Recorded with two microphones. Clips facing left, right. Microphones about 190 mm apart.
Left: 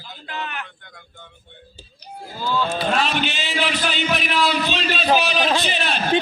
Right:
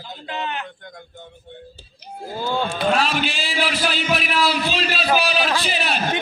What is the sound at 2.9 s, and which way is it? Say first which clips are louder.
A man's voice: right 1 dB; 5° right (ahead or behind).